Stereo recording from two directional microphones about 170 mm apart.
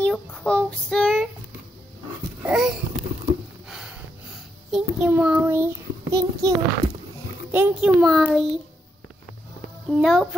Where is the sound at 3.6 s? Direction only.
5° right (ahead or behind); by 6.5 s 20° right (ahead or behind).